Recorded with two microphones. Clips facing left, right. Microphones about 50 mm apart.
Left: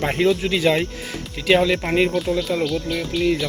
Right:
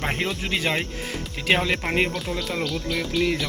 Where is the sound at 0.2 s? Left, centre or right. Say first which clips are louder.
Left 8 dB; right.